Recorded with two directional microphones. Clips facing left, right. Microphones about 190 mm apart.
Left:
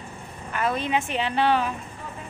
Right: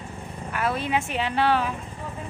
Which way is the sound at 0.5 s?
5° right (ahead or behind).